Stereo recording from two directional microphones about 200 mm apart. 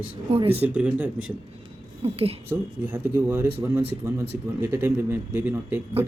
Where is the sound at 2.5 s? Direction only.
10° right (ahead or behind).